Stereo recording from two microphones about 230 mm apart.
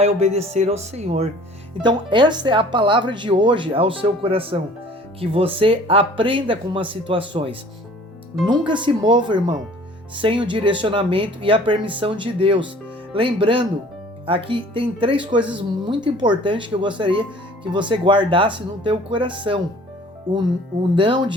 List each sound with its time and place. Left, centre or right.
0.0 s speech: right
20.9 s speech: right